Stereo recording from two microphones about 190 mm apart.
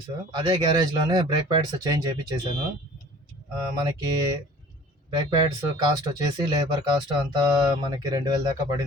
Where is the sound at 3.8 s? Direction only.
20° right (ahead or behind).